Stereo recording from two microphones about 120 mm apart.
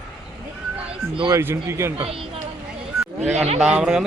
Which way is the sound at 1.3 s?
20° right (ahead or behind).